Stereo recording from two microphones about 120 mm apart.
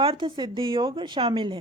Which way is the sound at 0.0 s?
45° right (ahead or behind).